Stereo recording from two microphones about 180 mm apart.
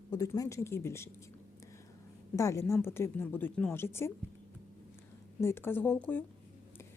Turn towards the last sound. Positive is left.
turn(degrees=10)  # may be behind; listen again after turning